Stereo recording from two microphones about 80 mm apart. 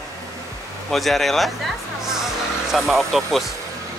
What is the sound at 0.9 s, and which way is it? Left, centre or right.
Speech, centre.